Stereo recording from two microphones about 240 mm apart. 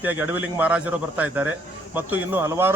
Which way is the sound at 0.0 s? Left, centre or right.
Centre.